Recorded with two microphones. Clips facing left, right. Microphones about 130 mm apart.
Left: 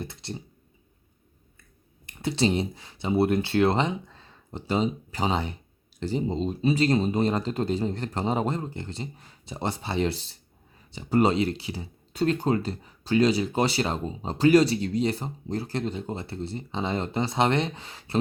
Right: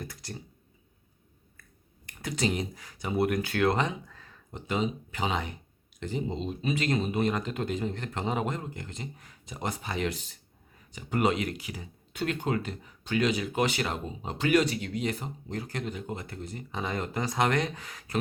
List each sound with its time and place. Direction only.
0.0 s speech: 25° left (ahead or behind)
2.0 s speech: 30° left (ahead or behind)